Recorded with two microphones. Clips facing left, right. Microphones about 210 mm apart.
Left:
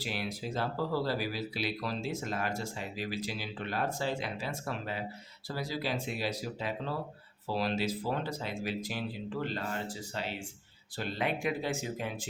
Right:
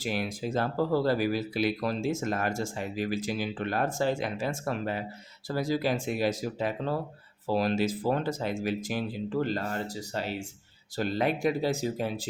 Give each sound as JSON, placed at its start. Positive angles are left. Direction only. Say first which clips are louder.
{"t": 0.0, "sound": "speech", "louder": "right 5 dB", "side_deg": -45}